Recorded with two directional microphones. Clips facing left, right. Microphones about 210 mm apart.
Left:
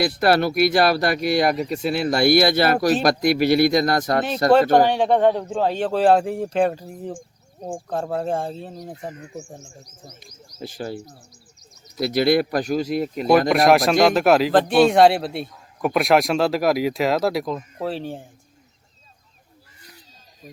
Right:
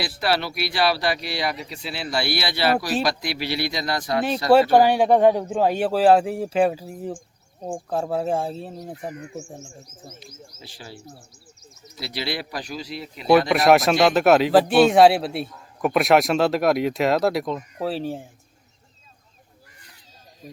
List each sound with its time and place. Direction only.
0.0 s speech: 50° left (ahead or behind)
4.7 s speech: 10° right (ahead or behind)
9.1 s speech: 20° left (ahead or behind)
9.5 s speech: centre (ahead or behind)
10.6 s speech: 45° left (ahead or behind)
13.7 s speech: centre (ahead or behind)